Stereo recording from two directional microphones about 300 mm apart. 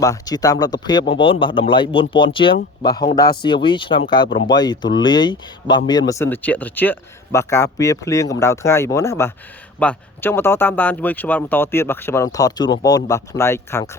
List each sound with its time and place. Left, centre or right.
0.0 s speech: centre